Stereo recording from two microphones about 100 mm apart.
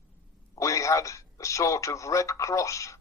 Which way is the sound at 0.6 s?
30° left (ahead or behind).